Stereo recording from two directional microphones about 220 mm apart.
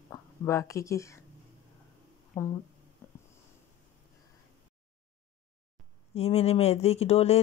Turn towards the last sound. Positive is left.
turn(degrees=30)  # may be behind; listen again after turning